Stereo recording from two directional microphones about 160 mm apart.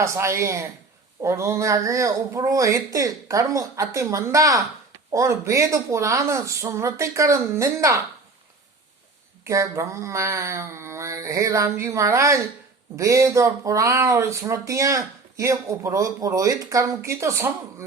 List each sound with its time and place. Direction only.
0.0 s speech: 15° right (ahead or behind)
9.4 s speech: 20° right (ahead or behind)